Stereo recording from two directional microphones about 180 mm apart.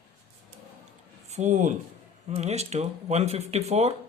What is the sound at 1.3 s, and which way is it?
Speech, 40° right (ahead or behind).